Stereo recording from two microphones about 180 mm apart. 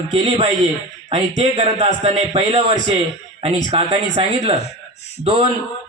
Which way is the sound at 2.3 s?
25° right (ahead or behind).